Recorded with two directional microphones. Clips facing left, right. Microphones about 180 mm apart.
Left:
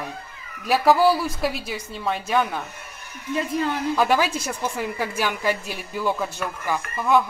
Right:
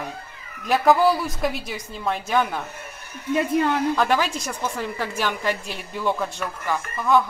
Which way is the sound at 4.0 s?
5° left (ahead or behind).